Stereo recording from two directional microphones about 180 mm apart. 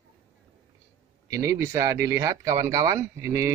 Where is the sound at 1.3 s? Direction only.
15° right (ahead or behind).